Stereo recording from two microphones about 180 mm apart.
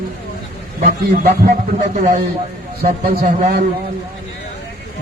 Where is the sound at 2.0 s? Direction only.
45° right (ahead or behind).